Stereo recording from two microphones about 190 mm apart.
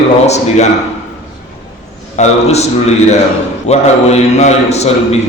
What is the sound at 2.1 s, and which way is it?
Speech, 35° left (ahead or behind).